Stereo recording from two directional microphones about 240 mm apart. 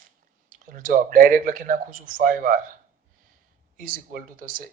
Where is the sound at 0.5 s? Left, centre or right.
Right.